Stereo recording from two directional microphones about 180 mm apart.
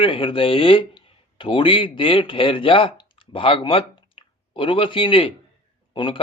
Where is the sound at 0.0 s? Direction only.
30° left (ahead or behind).